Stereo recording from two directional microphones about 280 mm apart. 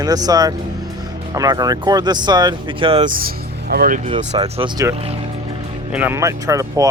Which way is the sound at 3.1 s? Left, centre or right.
Right.